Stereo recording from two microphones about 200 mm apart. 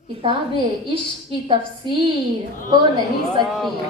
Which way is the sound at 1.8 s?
25° right (ahead or behind).